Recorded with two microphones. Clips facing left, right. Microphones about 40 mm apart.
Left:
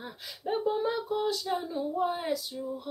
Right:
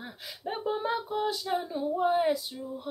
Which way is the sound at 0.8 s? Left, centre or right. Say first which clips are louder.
Even; right.